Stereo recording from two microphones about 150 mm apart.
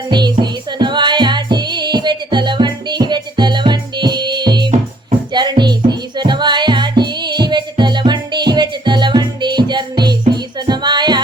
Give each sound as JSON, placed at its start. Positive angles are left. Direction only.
{"t": 0.1, "sound": "music", "side_deg": -30}